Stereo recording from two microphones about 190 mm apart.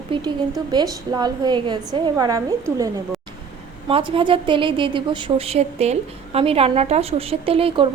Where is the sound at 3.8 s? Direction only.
25° right (ahead or behind).